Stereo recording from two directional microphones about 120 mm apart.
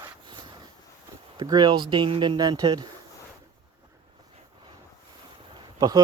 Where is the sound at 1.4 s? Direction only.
35° right (ahead or behind).